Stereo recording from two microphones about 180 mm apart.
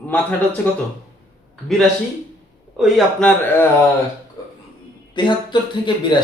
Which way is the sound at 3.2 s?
10° left (ahead or behind).